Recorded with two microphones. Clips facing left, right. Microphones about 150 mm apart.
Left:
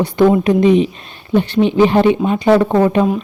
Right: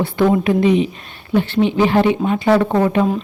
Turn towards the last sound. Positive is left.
turn(degrees=20)  # may be behind; listen again after turning